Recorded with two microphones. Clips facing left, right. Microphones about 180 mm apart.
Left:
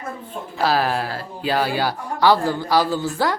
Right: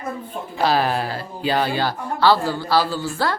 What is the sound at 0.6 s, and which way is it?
A woman's voice, centre (ahead or behind).